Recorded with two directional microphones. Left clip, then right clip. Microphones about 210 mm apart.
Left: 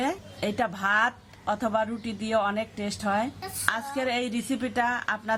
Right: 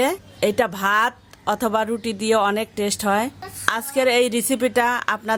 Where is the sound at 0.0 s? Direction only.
45° right (ahead or behind).